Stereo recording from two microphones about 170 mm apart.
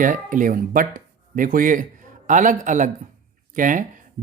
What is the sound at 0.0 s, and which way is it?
Speech, 50° right (ahead or behind).